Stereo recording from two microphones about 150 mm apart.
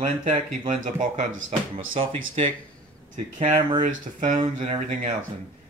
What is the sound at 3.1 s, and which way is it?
Speech, 55° right (ahead or behind).